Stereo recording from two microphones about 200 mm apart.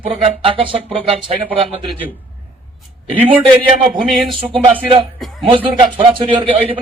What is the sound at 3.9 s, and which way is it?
Speech, centre (ahead or behind).